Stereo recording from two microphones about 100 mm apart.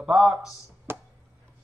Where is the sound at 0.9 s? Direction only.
25° right (ahead or behind).